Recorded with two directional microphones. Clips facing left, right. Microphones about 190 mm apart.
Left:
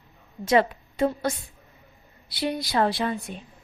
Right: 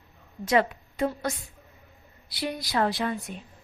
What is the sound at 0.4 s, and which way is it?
Speech, 30° left (ahead or behind).